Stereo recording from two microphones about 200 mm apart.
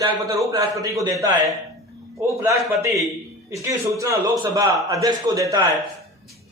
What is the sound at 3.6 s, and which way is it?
A man's voice, 15° right (ahead or behind).